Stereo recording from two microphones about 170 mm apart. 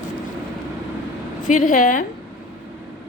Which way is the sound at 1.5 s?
50° left (ahead or behind).